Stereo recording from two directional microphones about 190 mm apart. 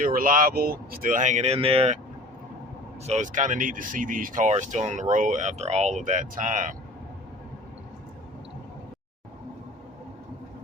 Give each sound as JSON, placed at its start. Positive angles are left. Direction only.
{"t": 0.0, "sound": "speech", "side_deg": -45}
{"t": 3.1, "sound": "speech", "side_deg": -40}